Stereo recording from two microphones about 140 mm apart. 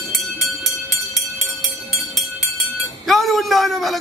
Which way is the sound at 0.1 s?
Centre (ahead or behind).